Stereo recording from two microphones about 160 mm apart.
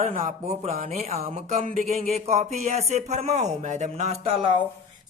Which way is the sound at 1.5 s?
50° right (ahead or behind).